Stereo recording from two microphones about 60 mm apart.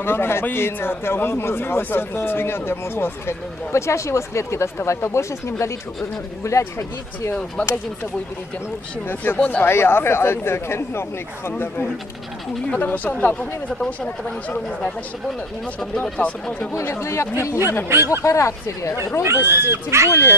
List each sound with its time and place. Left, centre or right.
0.0 s speech: left
9.2 s speech: left
9.7 s speech: left
12.7 s speech: left
16.0 s speech: centre
16.8 s speech: left
17.8 s speech: right
18.2 s speech: left
19.4 s speech: right
20.1 s speech: left